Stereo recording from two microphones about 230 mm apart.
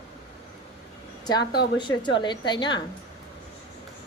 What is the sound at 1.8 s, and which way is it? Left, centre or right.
A woman's voice, centre.